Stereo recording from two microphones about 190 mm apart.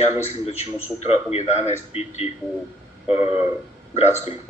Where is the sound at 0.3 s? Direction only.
35° left (ahead or behind).